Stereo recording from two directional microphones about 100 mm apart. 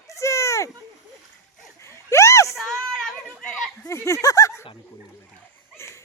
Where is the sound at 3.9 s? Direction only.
30° left (ahead or behind).